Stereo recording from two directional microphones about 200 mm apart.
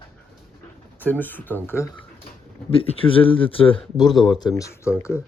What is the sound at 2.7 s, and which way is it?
Speech, 30° left (ahead or behind).